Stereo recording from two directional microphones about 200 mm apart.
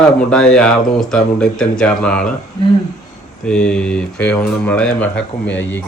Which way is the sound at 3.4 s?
5° left (ahead or behind).